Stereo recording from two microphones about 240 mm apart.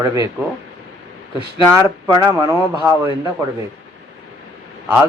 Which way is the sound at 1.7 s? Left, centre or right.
Centre.